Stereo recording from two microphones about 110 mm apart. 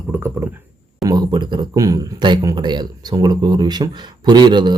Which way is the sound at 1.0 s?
40° right (ahead or behind).